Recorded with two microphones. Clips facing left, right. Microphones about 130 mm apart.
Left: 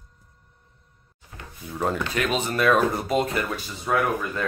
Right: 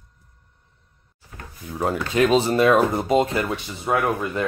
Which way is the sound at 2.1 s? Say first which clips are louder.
Right 7 dB; 30° right (ahead or behind).